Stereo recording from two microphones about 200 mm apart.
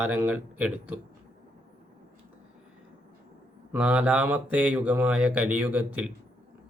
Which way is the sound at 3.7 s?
5° right (ahead or behind).